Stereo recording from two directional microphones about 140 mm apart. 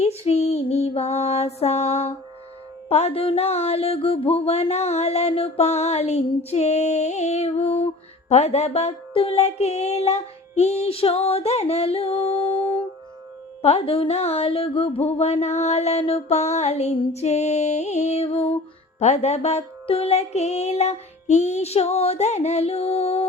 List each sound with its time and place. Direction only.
0.0 s mantra: 50° left (ahead or behind)
13.6 s mantra: 45° left (ahead or behind)